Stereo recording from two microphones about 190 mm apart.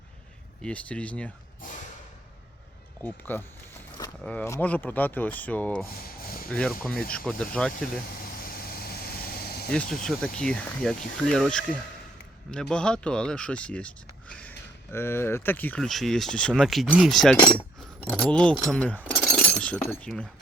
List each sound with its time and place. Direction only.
0.6 s speech: 5° left (ahead or behind)
1.6 s a sound: 45° left (ahead or behind)
3.0 s speech: 10° left (ahead or behind)
8.7 s vehicle: 55° left (ahead or behind)
9.6 s speech: 5° left (ahead or behind)